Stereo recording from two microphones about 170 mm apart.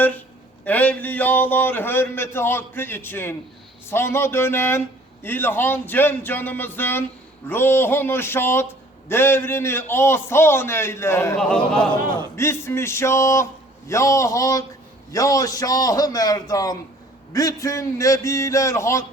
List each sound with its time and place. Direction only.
0.6 s a man's voice: 10° left (ahead or behind)
11.3 s a man's voice: 5° left (ahead or behind)